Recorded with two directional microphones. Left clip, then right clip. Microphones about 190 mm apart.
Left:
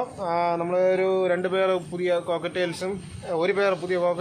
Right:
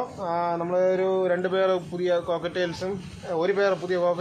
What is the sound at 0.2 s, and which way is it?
Speech, 10° left (ahead or behind).